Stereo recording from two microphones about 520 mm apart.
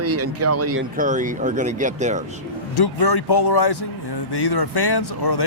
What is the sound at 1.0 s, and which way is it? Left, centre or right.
Speech, centre.